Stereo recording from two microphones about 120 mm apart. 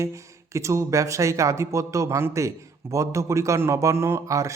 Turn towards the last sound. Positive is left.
turn(degrees=-25)  # may be behind; listen again after turning